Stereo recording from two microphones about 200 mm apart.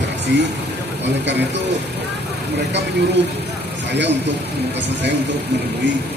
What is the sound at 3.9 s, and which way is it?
Speech, 60° right (ahead or behind).